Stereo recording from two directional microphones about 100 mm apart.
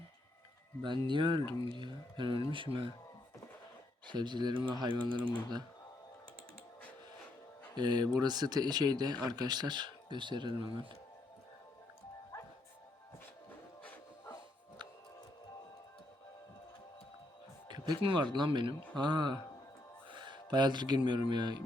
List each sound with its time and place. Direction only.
0.8 s speech: 50° right (ahead or behind)
4.0 s speech: 50° right (ahead or behind)
7.8 s speech: 45° right (ahead or behind)
17.7 s speech: 50° right (ahead or behind)